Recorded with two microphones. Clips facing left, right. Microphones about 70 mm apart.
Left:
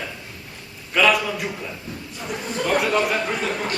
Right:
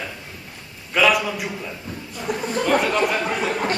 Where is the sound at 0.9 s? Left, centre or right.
Centre.